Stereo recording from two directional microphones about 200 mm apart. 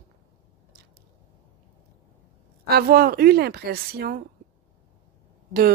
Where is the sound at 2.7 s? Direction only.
50° right (ahead or behind).